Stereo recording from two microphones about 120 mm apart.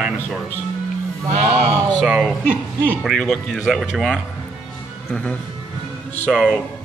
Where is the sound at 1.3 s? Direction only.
65° right (ahead or behind).